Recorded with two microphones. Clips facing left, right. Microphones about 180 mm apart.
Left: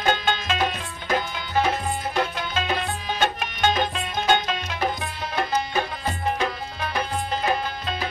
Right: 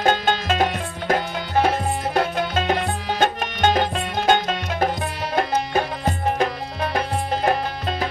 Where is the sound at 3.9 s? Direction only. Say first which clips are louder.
Right 3 dB; 50° right (ahead or behind).